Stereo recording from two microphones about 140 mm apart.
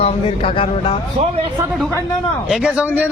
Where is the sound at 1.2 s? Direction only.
45° right (ahead or behind).